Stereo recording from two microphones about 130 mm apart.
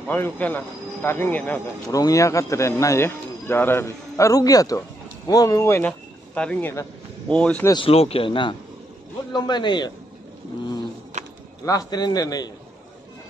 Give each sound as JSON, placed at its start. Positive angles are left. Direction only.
{"t": 0.1, "sound": "speech", "side_deg": 15}
{"t": 1.9, "sound": "a man's voice", "side_deg": 25}
{"t": 7.7, "sound": "a man's voice", "side_deg": 45}
{"t": 11.2, "sound": "a sound", "side_deg": -60}
{"t": 11.6, "sound": "a man's voice", "side_deg": 25}